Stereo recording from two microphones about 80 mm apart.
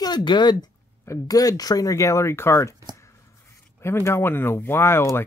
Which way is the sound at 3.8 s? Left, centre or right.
Left.